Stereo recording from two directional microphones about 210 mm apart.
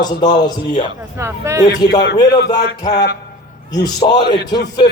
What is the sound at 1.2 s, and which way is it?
Speech, 15° right (ahead or behind).